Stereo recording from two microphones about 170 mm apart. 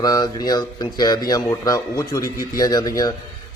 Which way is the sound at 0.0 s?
20° left (ahead or behind).